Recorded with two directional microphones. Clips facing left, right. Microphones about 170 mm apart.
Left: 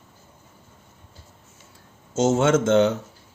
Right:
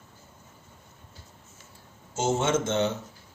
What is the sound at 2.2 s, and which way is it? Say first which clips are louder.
Speech: left 6 dB; 90° left.